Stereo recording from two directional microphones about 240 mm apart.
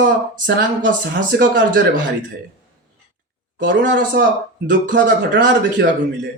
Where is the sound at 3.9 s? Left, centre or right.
Right.